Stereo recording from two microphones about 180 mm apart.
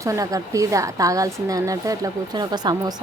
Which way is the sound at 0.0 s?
20° right (ahead or behind).